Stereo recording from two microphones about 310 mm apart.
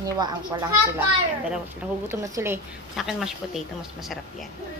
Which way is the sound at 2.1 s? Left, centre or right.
Centre.